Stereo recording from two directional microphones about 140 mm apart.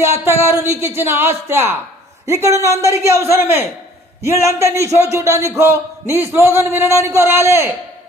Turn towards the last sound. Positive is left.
turn(degrees=-20)  # may be behind; listen again after turning